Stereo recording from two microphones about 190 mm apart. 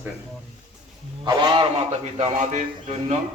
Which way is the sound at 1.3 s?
25° right (ahead or behind).